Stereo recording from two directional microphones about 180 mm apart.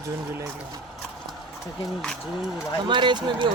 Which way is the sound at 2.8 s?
25° right (ahead or behind).